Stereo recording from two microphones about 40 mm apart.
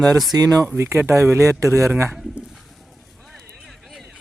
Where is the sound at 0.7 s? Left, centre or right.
Right.